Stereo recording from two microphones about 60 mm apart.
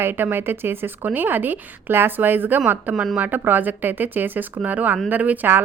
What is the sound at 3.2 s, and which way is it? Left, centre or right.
Speech, right.